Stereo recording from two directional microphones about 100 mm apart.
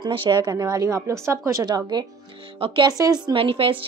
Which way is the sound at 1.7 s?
45° right (ahead or behind).